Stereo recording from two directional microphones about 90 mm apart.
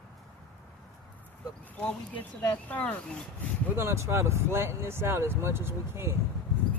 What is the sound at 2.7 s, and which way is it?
Speech, 15° left (ahead or behind).